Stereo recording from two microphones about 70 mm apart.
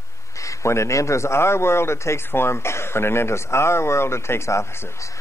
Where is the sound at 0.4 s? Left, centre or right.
Left.